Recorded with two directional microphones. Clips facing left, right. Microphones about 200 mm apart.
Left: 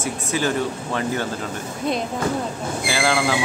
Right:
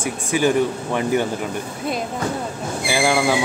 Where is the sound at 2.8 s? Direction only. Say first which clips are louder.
Right 3 dB; 15° right (ahead or behind).